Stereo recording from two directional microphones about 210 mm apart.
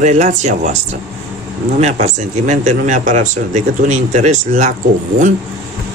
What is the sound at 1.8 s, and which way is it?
Speech, 30° right (ahead or behind).